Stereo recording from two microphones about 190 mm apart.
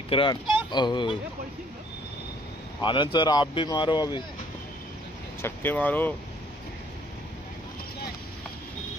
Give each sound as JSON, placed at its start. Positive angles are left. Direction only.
{"t": 0.1, "sound": "speech", "side_deg": 25}
{"t": 2.8, "sound": "speech", "side_deg": 25}
{"t": 5.4, "sound": "speech", "side_deg": 10}